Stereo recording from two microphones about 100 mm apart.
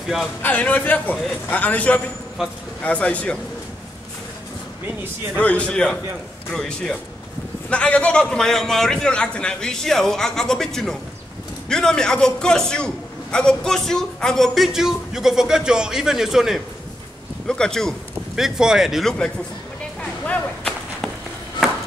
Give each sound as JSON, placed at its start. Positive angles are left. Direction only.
{"t": 0.4, "sound": "a man's voice", "side_deg": 15}
{"t": 5.4, "sound": "a man's voice", "side_deg": 10}
{"t": 17.5, "sound": "a man's voice", "side_deg": 5}
{"t": 18.3, "sound": "a man's voice", "side_deg": -5}
{"t": 20.0, "sound": "a sound", "side_deg": 10}